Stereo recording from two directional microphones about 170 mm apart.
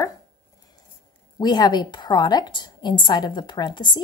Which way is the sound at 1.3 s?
25° left (ahead or behind).